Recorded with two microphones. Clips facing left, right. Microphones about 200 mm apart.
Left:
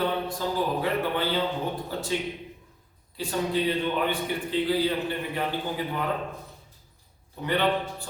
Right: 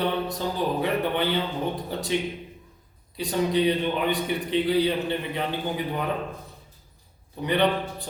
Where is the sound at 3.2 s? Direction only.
20° right (ahead or behind).